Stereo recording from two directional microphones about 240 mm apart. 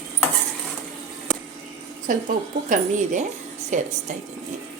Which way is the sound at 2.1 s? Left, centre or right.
Right.